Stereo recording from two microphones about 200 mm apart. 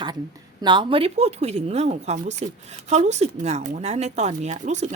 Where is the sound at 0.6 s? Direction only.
25° right (ahead or behind).